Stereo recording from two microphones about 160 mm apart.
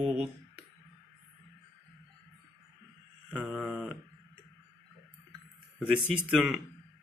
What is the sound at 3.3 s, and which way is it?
Mantra, centre (ahead or behind).